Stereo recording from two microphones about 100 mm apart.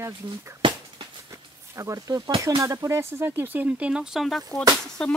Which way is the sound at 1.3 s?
30° right (ahead or behind).